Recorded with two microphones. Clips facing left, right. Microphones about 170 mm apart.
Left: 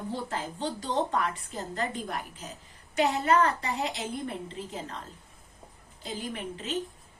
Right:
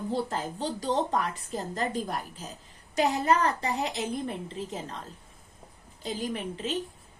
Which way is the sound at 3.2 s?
35° right (ahead or behind).